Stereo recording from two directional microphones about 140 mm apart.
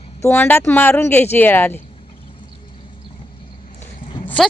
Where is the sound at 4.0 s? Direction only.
35° left (ahead or behind).